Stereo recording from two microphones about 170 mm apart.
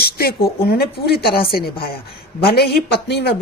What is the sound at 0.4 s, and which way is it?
A woman's voice, 65° left (ahead or behind).